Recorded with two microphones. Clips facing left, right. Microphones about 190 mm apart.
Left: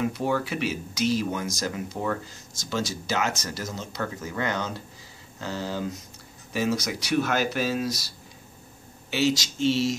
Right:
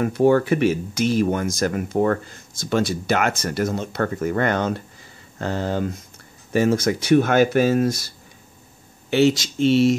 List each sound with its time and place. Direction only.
0.0 s speech: 55° right (ahead or behind)
9.1 s speech: 55° right (ahead or behind)